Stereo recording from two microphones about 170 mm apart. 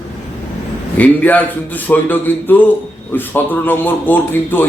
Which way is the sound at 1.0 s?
10° left (ahead or behind).